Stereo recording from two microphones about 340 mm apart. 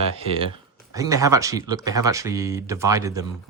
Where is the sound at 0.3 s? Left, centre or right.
Centre.